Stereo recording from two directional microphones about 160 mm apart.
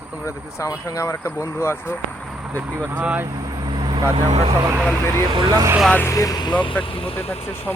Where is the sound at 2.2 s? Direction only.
5° right (ahead or behind).